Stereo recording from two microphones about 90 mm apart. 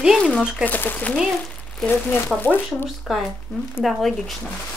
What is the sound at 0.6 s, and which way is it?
Speech, 20° left (ahead or behind).